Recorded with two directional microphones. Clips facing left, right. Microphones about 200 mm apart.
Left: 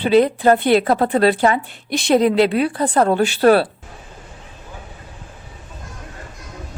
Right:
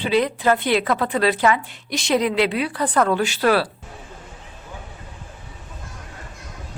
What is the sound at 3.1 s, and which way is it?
Speech, 55° left (ahead or behind).